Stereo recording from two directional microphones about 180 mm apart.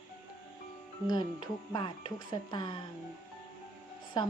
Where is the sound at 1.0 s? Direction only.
25° left (ahead or behind).